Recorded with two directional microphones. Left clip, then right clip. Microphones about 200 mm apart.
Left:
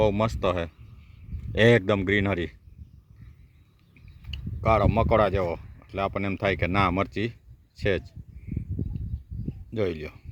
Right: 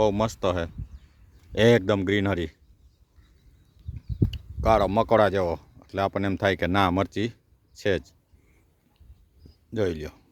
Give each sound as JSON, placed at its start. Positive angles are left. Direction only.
{"t": 0.0, "sound": "speech", "side_deg": -10}
{"t": 4.3, "sound": "speech", "side_deg": -20}
{"t": 9.7, "sound": "speech", "side_deg": -15}